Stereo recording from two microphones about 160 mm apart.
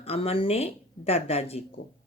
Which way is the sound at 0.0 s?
35° left (ahead or behind).